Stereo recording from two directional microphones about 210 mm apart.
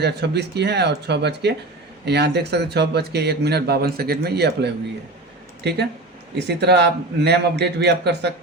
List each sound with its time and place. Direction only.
0.0 s speech: 50° right (ahead or behind)